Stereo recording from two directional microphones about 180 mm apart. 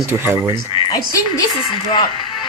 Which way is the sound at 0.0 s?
10° right (ahead or behind).